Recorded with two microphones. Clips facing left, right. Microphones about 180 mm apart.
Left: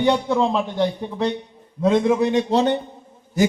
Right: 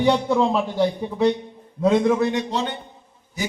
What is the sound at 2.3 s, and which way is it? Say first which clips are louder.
Speech: left 7 dB; 35° left (ahead or behind).